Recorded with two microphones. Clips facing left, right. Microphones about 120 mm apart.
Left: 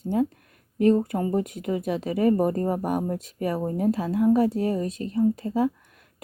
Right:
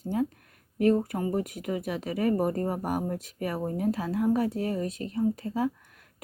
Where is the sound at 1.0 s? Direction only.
25° left (ahead or behind).